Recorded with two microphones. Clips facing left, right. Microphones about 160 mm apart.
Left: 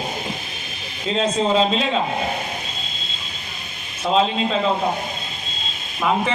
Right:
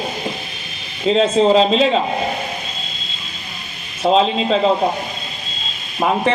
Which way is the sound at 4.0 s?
35° right (ahead or behind).